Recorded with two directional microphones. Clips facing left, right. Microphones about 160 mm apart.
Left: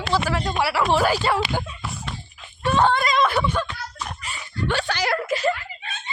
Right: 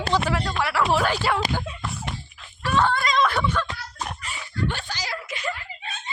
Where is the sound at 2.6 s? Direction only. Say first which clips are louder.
Left 3 dB; 20° left (ahead or behind).